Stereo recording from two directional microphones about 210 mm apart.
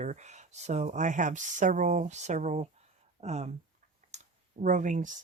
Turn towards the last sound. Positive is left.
turn(degrees=-35)  # may be behind; listen again after turning